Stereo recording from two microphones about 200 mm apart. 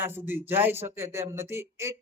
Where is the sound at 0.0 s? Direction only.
10° right (ahead or behind).